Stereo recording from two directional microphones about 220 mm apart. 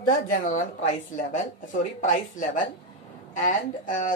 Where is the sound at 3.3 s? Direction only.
35° left (ahead or behind).